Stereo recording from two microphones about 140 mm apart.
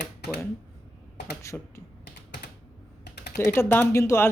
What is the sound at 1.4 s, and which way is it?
Speech, 20° left (ahead or behind).